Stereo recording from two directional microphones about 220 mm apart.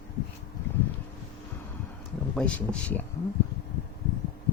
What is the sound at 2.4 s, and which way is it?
Speech, 5° left (ahead or behind).